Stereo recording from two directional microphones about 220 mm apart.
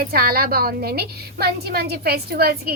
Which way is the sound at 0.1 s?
45° right (ahead or behind).